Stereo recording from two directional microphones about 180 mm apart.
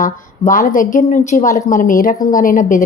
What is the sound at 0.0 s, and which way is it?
A woman's voice, 45° left (ahead or behind).